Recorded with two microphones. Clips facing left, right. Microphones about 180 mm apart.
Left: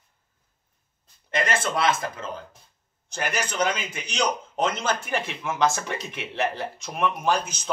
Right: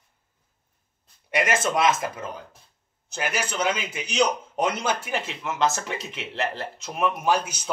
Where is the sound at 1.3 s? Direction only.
15° right (ahead or behind).